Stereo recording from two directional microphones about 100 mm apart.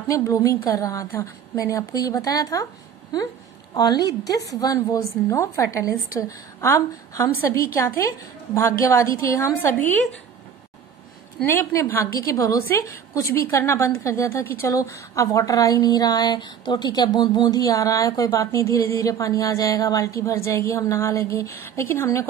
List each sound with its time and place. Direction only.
0.1 s a woman's voice: 35° left (ahead or behind)
3.7 s a woman's voice: 40° left (ahead or behind); by 9.9 s 25° left (ahead or behind)
11.4 s a woman's voice: 25° left (ahead or behind)